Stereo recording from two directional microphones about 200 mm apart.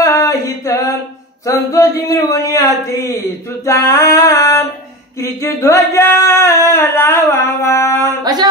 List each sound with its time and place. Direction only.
0.0 s a sound: 15° left (ahead or behind)
1.4 s singing: 15° left (ahead or behind)
8.2 s speech: 20° right (ahead or behind)